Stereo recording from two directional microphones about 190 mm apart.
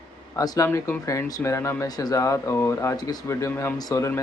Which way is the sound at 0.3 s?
20° left (ahead or behind).